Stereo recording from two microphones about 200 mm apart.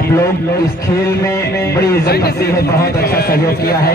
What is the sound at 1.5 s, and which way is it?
A man's voice, 55° left (ahead or behind).